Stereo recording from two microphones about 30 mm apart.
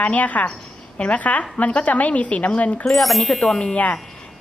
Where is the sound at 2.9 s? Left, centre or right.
Centre.